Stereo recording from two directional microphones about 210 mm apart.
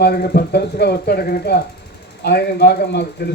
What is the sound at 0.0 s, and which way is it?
Speech, 50° left (ahead or behind).